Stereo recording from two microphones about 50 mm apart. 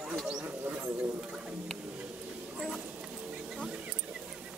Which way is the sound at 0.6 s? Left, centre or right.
Right.